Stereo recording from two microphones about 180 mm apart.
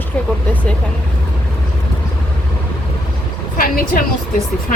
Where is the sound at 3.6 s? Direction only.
50° left (ahead or behind).